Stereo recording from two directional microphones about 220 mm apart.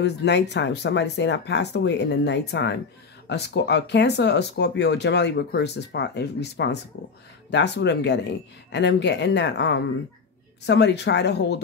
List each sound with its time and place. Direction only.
0.0 s speech: 50° left (ahead or behind)